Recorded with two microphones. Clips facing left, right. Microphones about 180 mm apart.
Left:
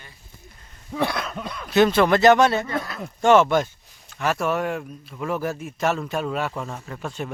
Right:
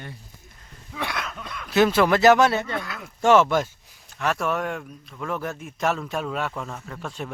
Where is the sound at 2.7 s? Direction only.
35° left (ahead or behind).